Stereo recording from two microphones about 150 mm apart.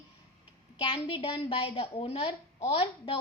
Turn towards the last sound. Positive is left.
turn(degrees=40)  # may be behind; listen again after turning